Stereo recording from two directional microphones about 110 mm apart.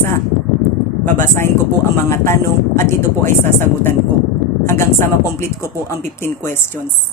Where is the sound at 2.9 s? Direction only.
20° left (ahead or behind).